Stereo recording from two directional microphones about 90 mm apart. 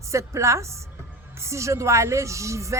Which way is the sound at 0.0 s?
35° right (ahead or behind).